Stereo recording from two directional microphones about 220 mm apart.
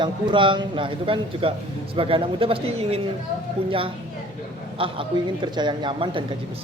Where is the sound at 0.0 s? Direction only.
20° right (ahead or behind).